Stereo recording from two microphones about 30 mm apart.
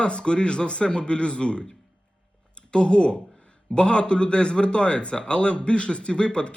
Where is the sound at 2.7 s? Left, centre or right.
Left.